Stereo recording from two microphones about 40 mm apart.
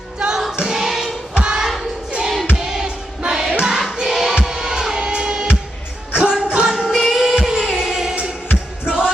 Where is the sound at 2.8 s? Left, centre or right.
Right.